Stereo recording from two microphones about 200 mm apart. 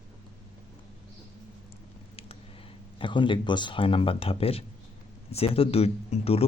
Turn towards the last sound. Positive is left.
turn(degrees=30)  # may be behind; listen again after turning